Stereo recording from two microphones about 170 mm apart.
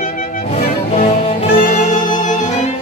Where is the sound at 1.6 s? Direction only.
45° left (ahead or behind).